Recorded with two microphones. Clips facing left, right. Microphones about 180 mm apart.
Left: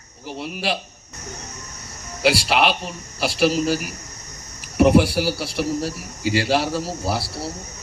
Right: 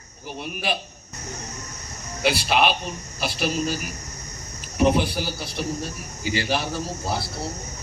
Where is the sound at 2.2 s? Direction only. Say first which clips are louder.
Left 2 dB; 80° left.